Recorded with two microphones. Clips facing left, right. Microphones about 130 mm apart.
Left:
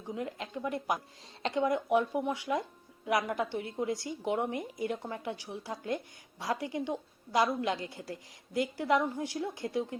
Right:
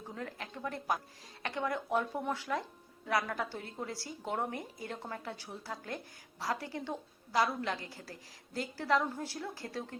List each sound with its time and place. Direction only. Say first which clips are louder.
0.1 s a woman's voice: left 7 dB; 20° left (ahead or behind)